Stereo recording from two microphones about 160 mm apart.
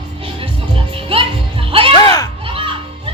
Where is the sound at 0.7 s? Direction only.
35° right (ahead or behind).